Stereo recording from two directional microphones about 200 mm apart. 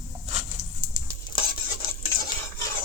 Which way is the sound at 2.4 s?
20° left (ahead or behind).